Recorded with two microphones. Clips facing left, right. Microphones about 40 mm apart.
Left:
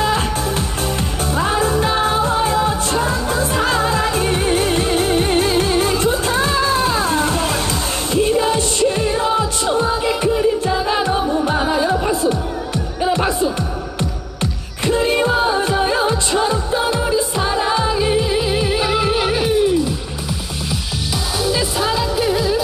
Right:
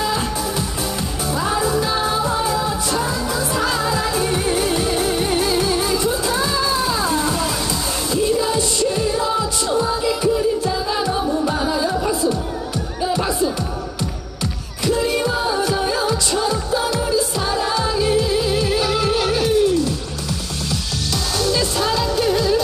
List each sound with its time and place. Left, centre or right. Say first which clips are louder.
1.3 s music: left 2 dB; left
14.9 s music: left 3 dB; left
21.4 s music: left 1 dB; centre